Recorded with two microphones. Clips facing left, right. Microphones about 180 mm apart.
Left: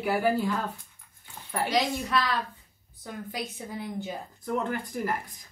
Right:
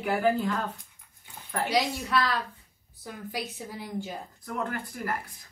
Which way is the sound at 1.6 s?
5° right (ahead or behind).